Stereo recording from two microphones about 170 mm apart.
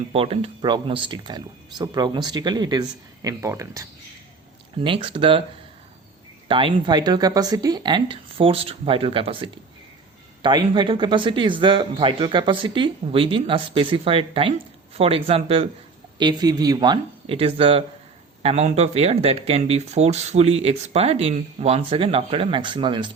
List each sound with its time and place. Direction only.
0.1 s speech: 35° right (ahead or behind); by 3.8 s 20° right (ahead or behind)
4.8 s speech: 30° right (ahead or behind)
6.5 s speech: 30° right (ahead or behind)
16.1 s speech: 25° right (ahead or behind)